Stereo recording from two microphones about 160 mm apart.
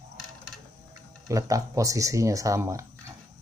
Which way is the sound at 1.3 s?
20° right (ahead or behind).